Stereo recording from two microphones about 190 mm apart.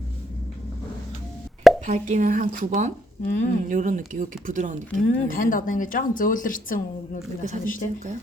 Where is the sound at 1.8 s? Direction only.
40° right (ahead or behind).